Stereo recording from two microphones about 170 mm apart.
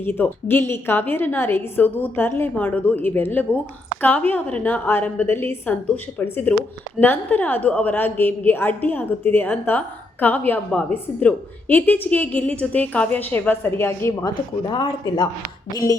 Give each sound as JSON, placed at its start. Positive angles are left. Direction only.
{"t": 0.0, "sound": "a woman's voice", "side_deg": 10}
{"t": 14.7, "sound": "speech", "side_deg": 25}